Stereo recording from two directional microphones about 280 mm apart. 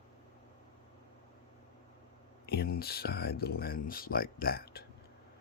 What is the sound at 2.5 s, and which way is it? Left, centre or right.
Speech, left.